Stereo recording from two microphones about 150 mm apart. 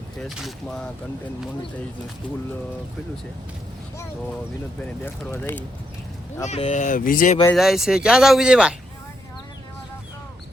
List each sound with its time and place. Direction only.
0.2 s speech: centre (ahead or behind)
4.8 s speech: 10° left (ahead or behind)
6.4 s speech: 50° left (ahead or behind); by 7.3 s 65° left (ahead or behind)
7.5 s speech: centre (ahead or behind)